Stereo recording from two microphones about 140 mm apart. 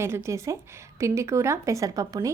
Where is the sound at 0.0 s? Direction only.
20° right (ahead or behind).